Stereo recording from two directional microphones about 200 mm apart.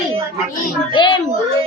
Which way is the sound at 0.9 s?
25° left (ahead or behind).